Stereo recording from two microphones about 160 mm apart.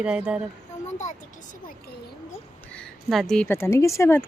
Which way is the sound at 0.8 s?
45° left (ahead or behind).